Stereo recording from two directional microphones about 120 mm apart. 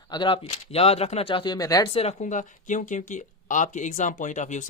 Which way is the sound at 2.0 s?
75° left (ahead or behind).